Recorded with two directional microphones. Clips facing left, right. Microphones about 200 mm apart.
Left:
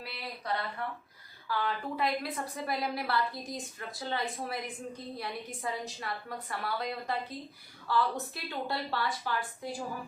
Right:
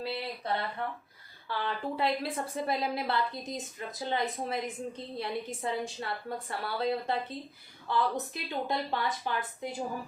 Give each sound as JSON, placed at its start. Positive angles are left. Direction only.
{"t": 0.0, "sound": "a woman's voice", "side_deg": -25}